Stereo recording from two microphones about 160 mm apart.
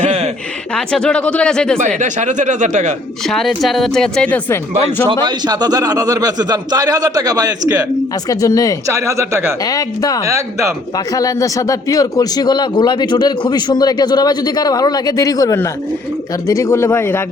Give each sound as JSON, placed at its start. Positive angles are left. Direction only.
{"t": 0.0, "sound": "a sound", "side_deg": -40}
{"t": 0.8, "sound": "speech", "side_deg": 5}
{"t": 2.0, "sound": "speech", "side_deg": -50}
{"t": 3.2, "sound": "speech", "side_deg": 0}
{"t": 5.0, "sound": "a man's voice", "side_deg": -25}
{"t": 8.3, "sound": "a man's voice", "side_deg": 20}
{"t": 8.9, "sound": "speech", "side_deg": -20}
{"t": 9.6, "sound": "a man's voice", "side_deg": 25}
{"t": 10.2, "sound": "a man's voice", "side_deg": -20}
{"t": 10.9, "sound": "a man's voice", "side_deg": 20}